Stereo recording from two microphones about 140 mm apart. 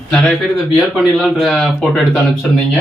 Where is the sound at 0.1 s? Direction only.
5° left (ahead or behind).